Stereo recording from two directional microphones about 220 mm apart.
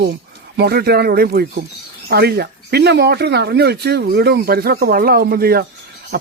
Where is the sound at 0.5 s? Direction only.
45° right (ahead or behind).